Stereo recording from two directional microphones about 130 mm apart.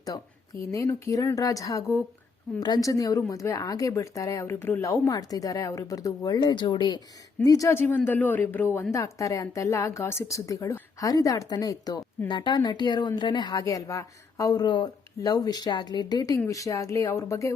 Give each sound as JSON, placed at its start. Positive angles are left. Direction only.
{"t": 0.7, "sound": "speech", "side_deg": 25}
{"t": 7.4, "sound": "a woman's voice", "side_deg": 25}